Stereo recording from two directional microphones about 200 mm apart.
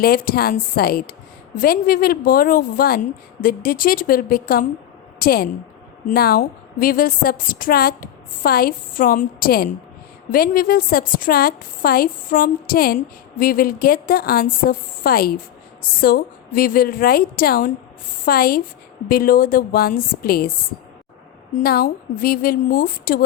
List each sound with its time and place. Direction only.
0.0 s a woman's voice: 50° left (ahead or behind)
21.5 s a woman's voice: 50° left (ahead or behind)